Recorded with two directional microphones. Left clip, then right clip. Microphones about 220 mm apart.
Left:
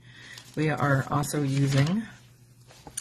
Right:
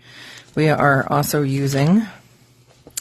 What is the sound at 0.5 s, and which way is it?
Speech, 50° right (ahead or behind).